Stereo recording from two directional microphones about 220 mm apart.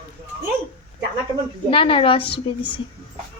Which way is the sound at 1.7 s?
25° left (ahead or behind).